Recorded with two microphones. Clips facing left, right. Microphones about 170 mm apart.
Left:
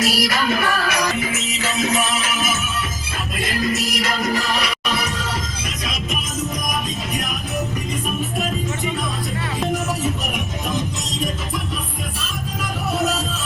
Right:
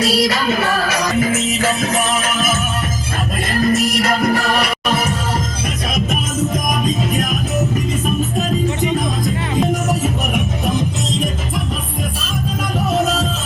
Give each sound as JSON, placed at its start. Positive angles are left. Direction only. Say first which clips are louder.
{"t": 0.0, "sound": "music", "louder": "right 4 dB", "side_deg": -30}
{"t": 1.1, "sound": "music", "louder": "right 8 dB", "side_deg": -50}